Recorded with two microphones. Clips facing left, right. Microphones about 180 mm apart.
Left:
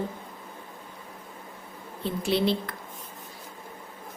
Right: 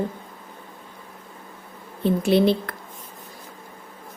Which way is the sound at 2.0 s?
55° right (ahead or behind).